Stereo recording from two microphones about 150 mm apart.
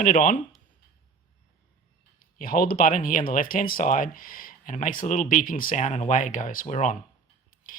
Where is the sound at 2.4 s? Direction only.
70° left (ahead or behind); by 6.9 s 55° left (ahead or behind).